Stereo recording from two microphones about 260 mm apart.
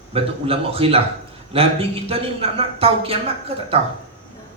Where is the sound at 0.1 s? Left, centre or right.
Right.